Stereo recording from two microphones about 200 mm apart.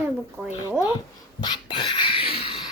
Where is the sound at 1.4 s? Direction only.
25° left (ahead or behind).